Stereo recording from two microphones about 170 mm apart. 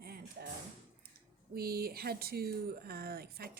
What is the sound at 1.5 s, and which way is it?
Speech, 65° right (ahead or behind).